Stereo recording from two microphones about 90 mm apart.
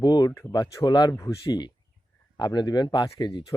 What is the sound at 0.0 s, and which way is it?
Speech, 50° left (ahead or behind).